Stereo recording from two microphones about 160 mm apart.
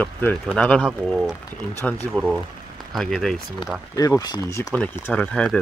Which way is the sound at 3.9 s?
20° left (ahead or behind).